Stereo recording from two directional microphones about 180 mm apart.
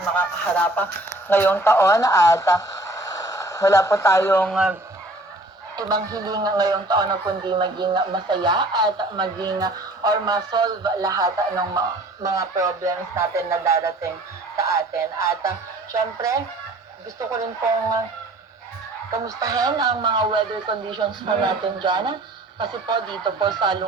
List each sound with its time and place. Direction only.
0.2 s speech: 10° left (ahead or behind)
4.5 s speech: 5° right (ahead or behind)
5.7 s a man's voice: 20° right (ahead or behind)
19.1 s a man's voice: 20° right (ahead or behind)